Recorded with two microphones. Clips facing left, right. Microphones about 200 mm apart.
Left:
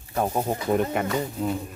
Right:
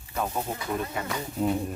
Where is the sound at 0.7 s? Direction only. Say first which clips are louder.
Left 8 dB; 65° left (ahead or behind).